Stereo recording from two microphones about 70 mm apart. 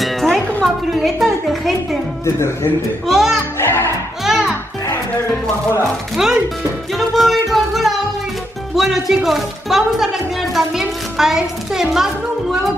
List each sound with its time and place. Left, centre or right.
0.3 s music: centre
0.9 s speech: centre
2.2 s speech: left
3.1 s music: centre
3.5 s music: left
4.2 s music: centre
6.1 s speech: centre
7.0 s music: centre
8.7 s speech: centre